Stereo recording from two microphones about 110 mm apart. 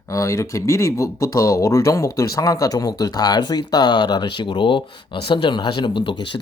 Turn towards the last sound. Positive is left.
turn(degrees=45)  # may be behind; listen again after turning